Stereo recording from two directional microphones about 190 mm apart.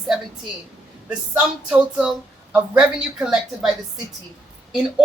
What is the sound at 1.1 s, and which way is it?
Speech, 5° right (ahead or behind).